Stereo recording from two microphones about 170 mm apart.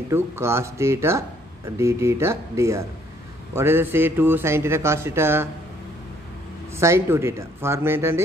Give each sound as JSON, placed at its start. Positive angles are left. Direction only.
{"t": 0.1, "sound": "speech", "side_deg": -15}
{"t": 6.8, "sound": "speech", "side_deg": -15}